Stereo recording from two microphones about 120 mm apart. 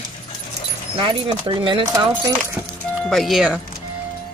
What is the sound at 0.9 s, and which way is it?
Speech, 45° right (ahead or behind).